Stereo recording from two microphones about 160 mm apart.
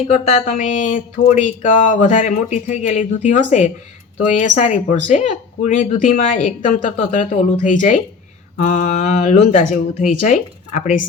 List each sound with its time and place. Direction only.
0.1 s speech: 45° left (ahead or behind)